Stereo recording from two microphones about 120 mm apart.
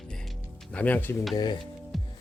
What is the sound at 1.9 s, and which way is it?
Music, centre (ahead or behind).